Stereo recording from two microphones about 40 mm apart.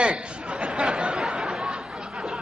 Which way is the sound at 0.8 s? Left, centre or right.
Centre.